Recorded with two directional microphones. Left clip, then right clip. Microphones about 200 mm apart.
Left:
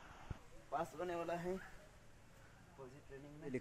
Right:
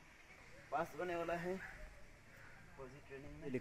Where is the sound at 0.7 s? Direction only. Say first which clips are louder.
Right 1 dB; 5° left (ahead or behind).